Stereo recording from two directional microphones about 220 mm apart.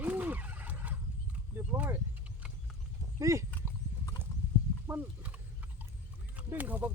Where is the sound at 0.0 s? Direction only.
10° right (ahead or behind).